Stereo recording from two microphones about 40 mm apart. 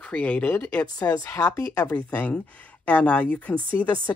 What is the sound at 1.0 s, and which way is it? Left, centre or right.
Speech, left.